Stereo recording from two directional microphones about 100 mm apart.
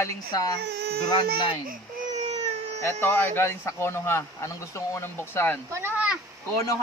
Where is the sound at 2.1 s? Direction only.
90° right.